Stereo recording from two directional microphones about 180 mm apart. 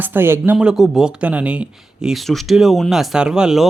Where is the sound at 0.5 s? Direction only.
Centre (ahead or behind).